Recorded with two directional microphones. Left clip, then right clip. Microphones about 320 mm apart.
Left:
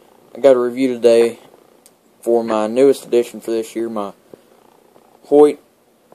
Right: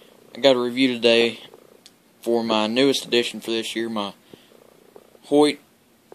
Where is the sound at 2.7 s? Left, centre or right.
Centre.